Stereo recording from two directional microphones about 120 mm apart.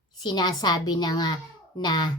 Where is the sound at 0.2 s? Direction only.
35° left (ahead or behind).